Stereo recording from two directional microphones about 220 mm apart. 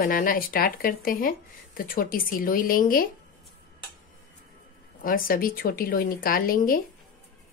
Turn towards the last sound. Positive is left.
turn(degrees=40)  # may be behind; listen again after turning